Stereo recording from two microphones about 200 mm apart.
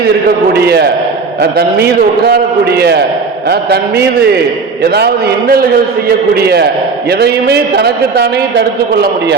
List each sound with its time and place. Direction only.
0.0 s a man's voice: 50° right (ahead or behind)